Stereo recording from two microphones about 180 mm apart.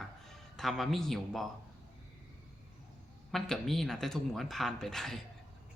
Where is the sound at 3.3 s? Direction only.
Centre (ahead or behind).